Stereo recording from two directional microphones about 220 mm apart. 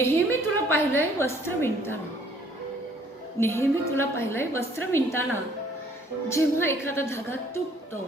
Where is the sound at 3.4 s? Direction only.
10° left (ahead or behind).